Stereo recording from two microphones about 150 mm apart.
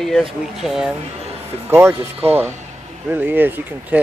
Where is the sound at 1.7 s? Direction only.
15° right (ahead or behind).